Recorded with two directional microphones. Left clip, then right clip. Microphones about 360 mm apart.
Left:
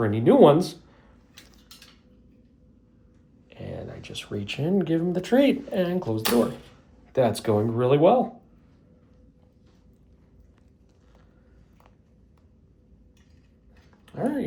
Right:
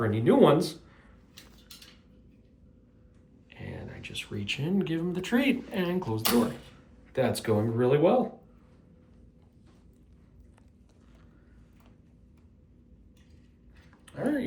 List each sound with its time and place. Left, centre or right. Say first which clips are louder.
0.0 s speech: left 5 dB; centre
3.5 s speech: left 6 dB; centre
14.0 s dog: left 2 dB; centre